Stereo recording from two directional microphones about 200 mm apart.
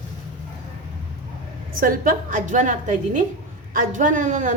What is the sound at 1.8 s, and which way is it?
A woman's voice, 45° right (ahead or behind).